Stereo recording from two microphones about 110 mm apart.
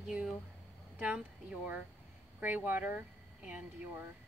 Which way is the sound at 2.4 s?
15° right (ahead or behind).